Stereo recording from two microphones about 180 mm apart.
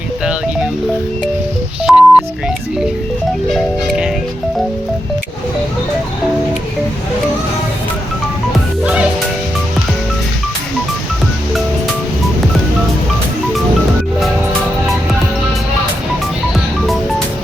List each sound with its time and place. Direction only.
0.3 s music: 5° right (ahead or behind)
1.8 s telephone dialing: 5° right (ahead or behind)
3.5 s music: centre (ahead or behind)